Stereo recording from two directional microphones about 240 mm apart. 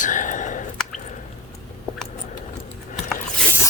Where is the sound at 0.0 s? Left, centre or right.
Left.